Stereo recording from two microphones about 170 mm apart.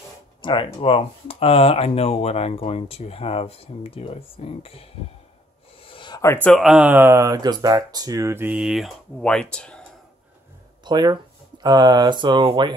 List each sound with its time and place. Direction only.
0.4 s speech: 30° left (ahead or behind)
5.9 s a sound: 30° left (ahead or behind)
6.2 s speech: 10° left (ahead or behind)
10.8 s speech: 25° right (ahead or behind)